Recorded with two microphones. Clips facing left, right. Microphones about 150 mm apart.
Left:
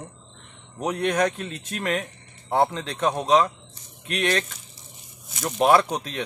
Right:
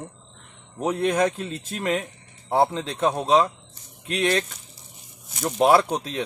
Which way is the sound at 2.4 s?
10° right (ahead or behind).